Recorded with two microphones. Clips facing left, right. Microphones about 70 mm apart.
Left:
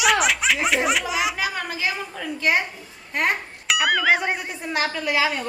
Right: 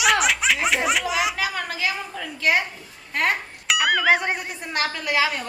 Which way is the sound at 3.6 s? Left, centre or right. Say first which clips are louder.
Even; centre.